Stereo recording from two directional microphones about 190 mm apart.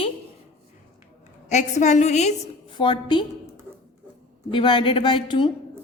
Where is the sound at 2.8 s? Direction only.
25° left (ahead or behind).